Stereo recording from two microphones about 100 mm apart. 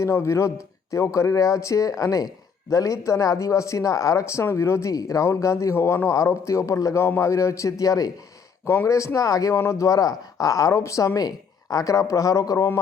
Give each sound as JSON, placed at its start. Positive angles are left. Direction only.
{"t": 0.0, "sound": "speech", "side_deg": 30}
{"t": 8.6, "sound": "speech", "side_deg": 25}